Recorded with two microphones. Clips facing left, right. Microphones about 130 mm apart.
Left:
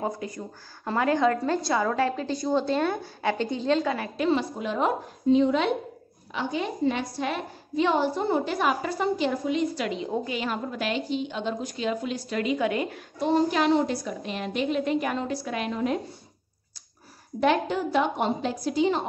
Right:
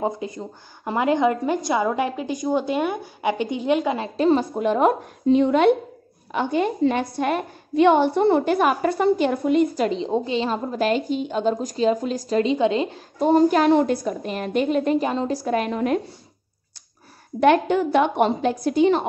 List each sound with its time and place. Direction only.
0.0 s a woman's voice: 20° right (ahead or behind)
4.2 s a woman's voice: 45° right (ahead or behind)
9.8 s a woman's voice: 30° right (ahead or behind)
13.2 s a woman's voice: 45° right (ahead or behind)
15.0 s a woman's voice: 30° right (ahead or behind); by 16.0 s 60° right (ahead or behind)
17.4 s a woman's voice: 65° right (ahead or behind)